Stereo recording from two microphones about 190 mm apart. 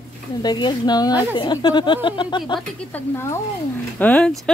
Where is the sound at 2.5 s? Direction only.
10° left (ahead or behind).